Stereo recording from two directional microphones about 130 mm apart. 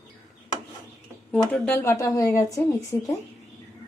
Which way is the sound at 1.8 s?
20° left (ahead or behind).